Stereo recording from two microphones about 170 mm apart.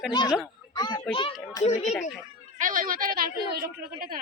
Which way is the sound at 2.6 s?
50° right (ahead or behind).